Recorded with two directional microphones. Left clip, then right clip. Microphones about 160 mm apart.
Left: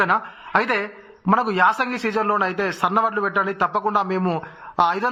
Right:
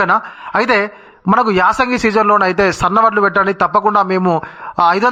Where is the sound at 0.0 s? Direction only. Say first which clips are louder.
Right 6 dB; 35° right (ahead or behind).